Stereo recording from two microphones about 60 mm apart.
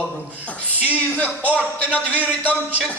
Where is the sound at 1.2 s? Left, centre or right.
Right.